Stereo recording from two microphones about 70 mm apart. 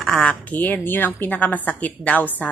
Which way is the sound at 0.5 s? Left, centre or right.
Left.